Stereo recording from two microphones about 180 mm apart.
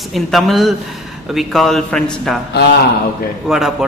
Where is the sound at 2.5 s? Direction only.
70° left (ahead or behind).